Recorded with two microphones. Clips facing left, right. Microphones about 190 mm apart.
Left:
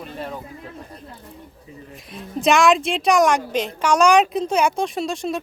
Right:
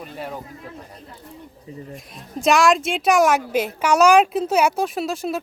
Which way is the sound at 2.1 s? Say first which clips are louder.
Left 1 dB; centre (ahead or behind).